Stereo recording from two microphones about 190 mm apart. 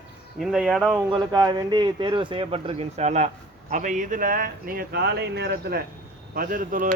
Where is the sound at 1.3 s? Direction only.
20° right (ahead or behind).